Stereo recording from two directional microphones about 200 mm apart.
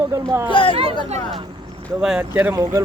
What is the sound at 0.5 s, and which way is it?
Speech, 25° left (ahead or behind).